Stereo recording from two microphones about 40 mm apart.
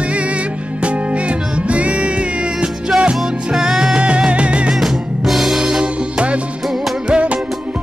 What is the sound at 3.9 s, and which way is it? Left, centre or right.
Music, right.